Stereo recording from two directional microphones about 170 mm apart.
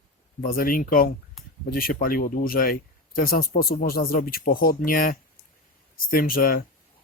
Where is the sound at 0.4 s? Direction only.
55° left (ahead or behind).